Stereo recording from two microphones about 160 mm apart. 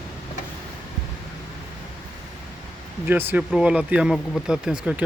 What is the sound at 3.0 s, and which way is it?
Speech, 15° right (ahead or behind).